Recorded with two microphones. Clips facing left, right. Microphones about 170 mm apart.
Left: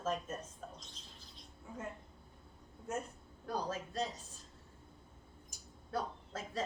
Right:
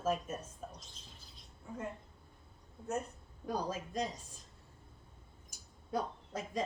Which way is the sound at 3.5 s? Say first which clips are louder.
Right 2 dB; 10° right (ahead or behind).